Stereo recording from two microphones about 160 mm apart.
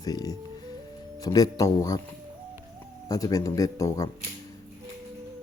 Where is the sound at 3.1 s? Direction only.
20° left (ahead or behind).